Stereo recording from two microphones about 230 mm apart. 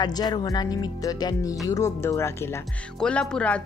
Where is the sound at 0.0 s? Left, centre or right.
Centre.